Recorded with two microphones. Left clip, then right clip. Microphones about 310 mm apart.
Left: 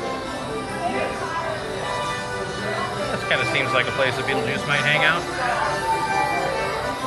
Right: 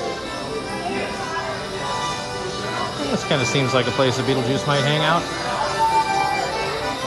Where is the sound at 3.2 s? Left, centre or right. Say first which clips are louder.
Even; centre.